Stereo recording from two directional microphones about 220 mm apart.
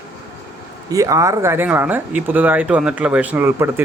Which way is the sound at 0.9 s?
15° right (ahead or behind).